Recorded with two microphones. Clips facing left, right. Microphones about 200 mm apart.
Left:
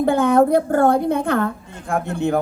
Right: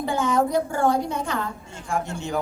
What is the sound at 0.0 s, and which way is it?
Speech, 55° left (ahead or behind).